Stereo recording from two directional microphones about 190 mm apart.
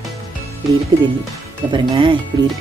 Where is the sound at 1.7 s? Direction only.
25° right (ahead or behind).